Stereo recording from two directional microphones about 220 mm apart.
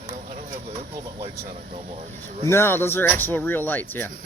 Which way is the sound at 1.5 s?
30° right (ahead or behind).